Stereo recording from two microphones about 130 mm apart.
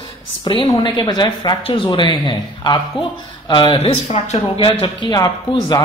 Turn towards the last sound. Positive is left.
turn(degrees=30)  # may be behind; listen again after turning